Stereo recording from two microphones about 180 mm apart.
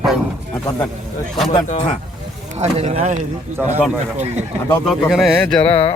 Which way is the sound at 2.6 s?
35° right (ahead or behind).